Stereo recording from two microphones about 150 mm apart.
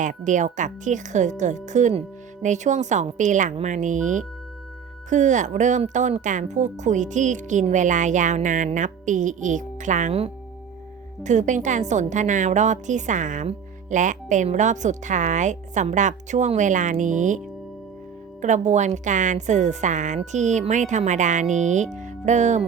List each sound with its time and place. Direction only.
0.0 s a woman's voice: 55° right (ahead or behind)
11.2 s a woman's voice: 55° right (ahead or behind)
18.4 s a woman's voice: 50° right (ahead or behind)